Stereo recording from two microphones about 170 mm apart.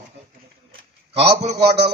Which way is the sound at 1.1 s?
35° right (ahead or behind).